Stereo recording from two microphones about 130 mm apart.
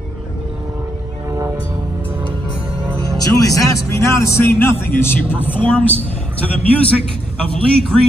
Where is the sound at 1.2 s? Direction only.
25° right (ahead or behind).